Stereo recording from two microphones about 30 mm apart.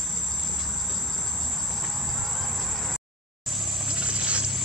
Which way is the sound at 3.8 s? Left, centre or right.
Right.